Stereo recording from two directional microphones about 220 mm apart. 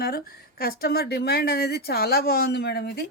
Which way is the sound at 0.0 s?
40° left (ahead or behind).